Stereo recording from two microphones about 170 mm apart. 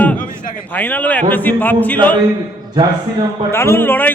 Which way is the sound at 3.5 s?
15° left (ahead or behind).